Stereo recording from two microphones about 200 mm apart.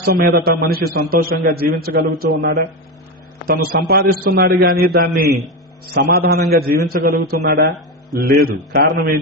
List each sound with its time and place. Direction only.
0.0 s a man's voice: 45° right (ahead or behind)